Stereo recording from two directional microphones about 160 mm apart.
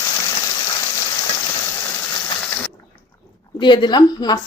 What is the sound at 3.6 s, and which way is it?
Frying, 30° left (ahead or behind).